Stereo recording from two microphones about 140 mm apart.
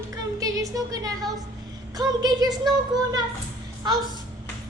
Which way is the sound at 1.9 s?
30° right (ahead or behind).